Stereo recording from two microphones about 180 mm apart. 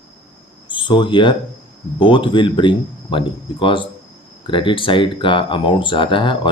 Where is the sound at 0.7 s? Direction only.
25° left (ahead or behind).